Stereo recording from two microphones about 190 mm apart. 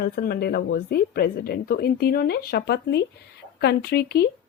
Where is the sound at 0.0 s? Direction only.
55° left (ahead or behind).